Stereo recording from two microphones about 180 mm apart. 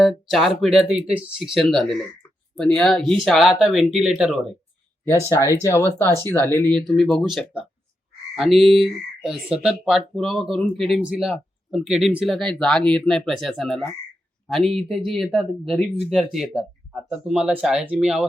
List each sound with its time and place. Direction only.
0.3 s speech: centre (ahead or behind)
5.3 s speech: 15° left (ahead or behind)
6.1 s speech: 20° right (ahead or behind)
6.3 s speech: 10° left (ahead or behind); by 18.3 s 5° right (ahead or behind)